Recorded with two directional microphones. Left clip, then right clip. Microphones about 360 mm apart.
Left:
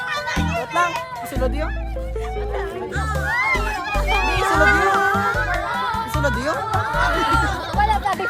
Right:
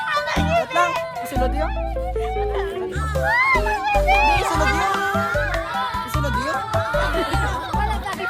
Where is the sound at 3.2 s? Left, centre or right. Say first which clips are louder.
Right 4 dB; centre.